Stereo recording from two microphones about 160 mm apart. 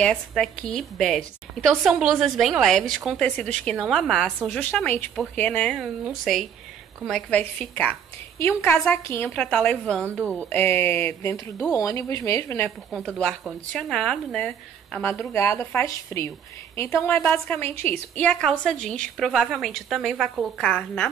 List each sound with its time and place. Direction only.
0.0 s a woman's voice: 5° left (ahead or behind)
5.8 s a woman's voice: centre (ahead or behind); by 12.7 s 15° left (ahead or behind)
12.9 s a woman's voice: 5° left (ahead or behind)